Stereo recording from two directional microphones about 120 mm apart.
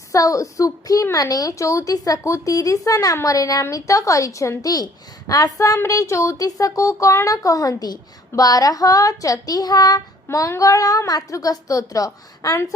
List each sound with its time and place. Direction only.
0.1 s a child's voice: 25° left (ahead or behind)